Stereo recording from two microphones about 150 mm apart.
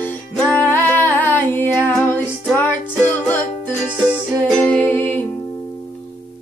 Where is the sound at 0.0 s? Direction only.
10° left (ahead or behind).